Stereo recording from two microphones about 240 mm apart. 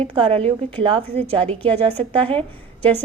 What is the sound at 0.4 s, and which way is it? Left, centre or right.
Speech, right.